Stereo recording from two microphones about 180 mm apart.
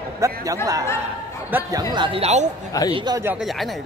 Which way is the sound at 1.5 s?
20° right (ahead or behind).